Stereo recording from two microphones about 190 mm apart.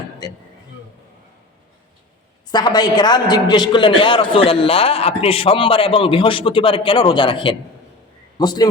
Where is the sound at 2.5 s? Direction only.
20° left (ahead or behind).